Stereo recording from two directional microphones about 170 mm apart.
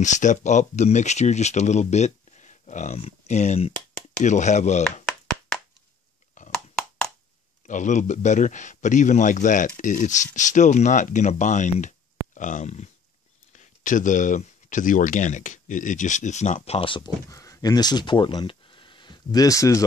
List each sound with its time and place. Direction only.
0.0 s speech: 45° left (ahead or behind)
6.5 s a sound: 5° left (ahead or behind)
7.6 s speech: 45° left (ahead or behind); by 17.1 s 30° left (ahead or behind)
17.3 s speech: 20° left (ahead or behind)